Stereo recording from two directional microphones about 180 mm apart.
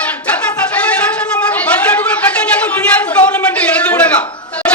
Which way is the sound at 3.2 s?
5° left (ahead or behind).